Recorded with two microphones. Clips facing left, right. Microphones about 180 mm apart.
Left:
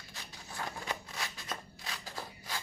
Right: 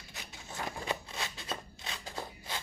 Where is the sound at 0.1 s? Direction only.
25° right (ahead or behind).